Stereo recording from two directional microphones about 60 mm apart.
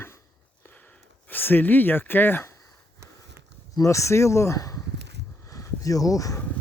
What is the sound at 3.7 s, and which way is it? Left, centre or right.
Speech, left.